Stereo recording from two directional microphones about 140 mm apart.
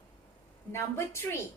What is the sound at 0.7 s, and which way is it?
Speech, 20° left (ahead or behind).